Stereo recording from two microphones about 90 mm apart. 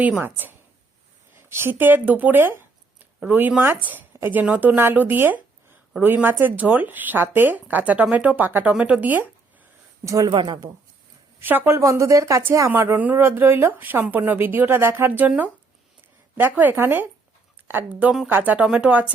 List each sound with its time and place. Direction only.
0.2 s speech: 20° right (ahead or behind)
10.2 s speech: 60° right (ahead or behind)
11.3 s a woman's voice: 20° right (ahead or behind)
11.8 s speech: 35° right (ahead or behind)
16.4 s speech: 20° right (ahead or behind)